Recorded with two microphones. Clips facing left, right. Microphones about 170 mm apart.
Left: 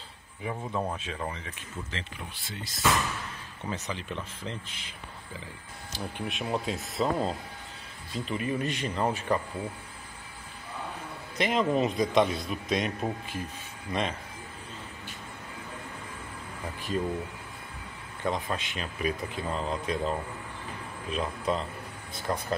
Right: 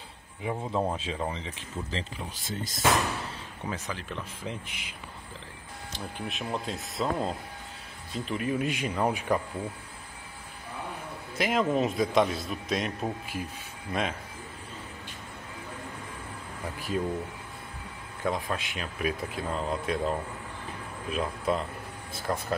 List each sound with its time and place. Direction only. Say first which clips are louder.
0.4 s speech: right 3 dB; 20° right (ahead or behind); by 2.9 s 45° right (ahead or behind)
3.6 s speech: left 1 dB; 5° right (ahead or behind)
5.9 s speech: left 2 dB; centre (ahead or behind)
11.3 s a man's voice: even; centre (ahead or behind)
16.9 s speech: even; 5° right (ahead or behind)
18.2 s speech: even; 5° right (ahead or behind)